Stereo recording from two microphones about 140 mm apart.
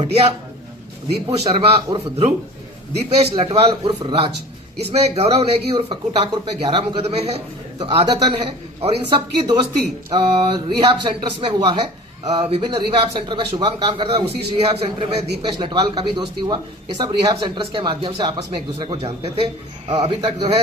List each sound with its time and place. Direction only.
0.0 s speech: 45° right (ahead or behind)
4.0 s a man's voice: 35° right (ahead or behind)
4.9 s speech: 45° right (ahead or behind)
7.8 s a man's voice: 35° right (ahead or behind)
10.2 s a man's voice: 35° right (ahead or behind)